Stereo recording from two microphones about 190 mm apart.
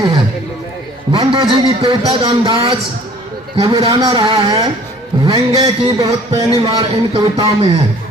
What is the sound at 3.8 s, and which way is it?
A man's voice, 25° right (ahead or behind).